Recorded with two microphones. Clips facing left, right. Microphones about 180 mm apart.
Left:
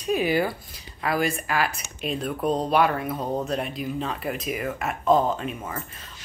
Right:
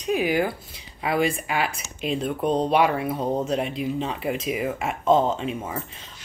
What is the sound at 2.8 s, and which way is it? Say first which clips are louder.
Speech: right 1 dB; 5° right (ahead or behind).